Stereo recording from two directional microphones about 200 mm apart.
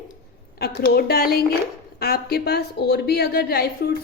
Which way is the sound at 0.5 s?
50° left (ahead or behind).